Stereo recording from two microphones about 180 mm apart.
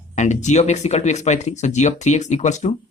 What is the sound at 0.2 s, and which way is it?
Speech, 40° left (ahead or behind).